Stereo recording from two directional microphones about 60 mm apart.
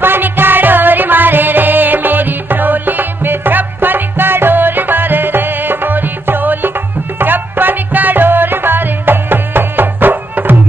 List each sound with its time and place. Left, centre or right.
0.0 s music: right